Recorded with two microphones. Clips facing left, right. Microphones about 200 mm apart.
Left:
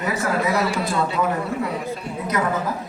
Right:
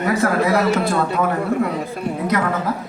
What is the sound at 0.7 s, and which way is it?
Speech, 55° right (ahead or behind).